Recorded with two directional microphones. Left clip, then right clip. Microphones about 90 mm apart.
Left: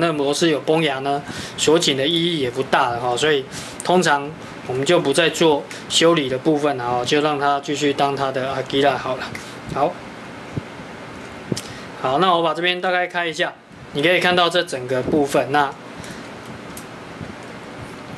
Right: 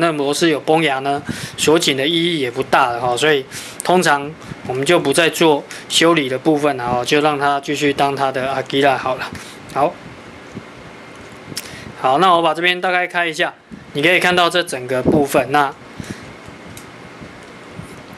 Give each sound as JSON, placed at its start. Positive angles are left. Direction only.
{"t": 0.0, "sound": "speech", "side_deg": -25}
{"t": 11.5, "sound": "a man's voice", "side_deg": -30}